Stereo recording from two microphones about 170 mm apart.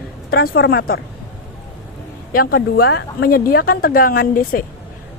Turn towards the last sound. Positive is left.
turn(degrees=60)  # may be behind; listen again after turning